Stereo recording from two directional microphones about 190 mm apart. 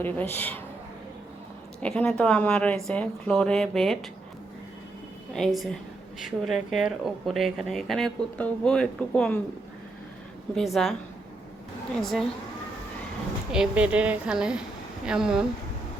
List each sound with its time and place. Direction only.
0.0 s speech: 10° left (ahead or behind)
1.8 s speech: 5° left (ahead or behind)
5.3 s speech: centre (ahead or behind)
10.5 s speech: centre (ahead or behind)
13.5 s speech: 5° right (ahead or behind)